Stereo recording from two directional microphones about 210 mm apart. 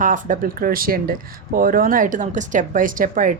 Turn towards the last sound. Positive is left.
turn(degrees=-40)  # may be behind; listen again after turning